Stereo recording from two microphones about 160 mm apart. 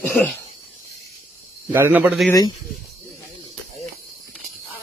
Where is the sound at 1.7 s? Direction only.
10° right (ahead or behind).